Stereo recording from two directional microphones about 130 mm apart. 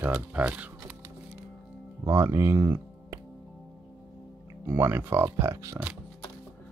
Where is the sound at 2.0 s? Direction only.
20° right (ahead or behind).